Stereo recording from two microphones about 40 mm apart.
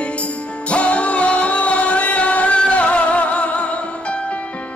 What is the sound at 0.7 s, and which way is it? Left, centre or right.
Music, left.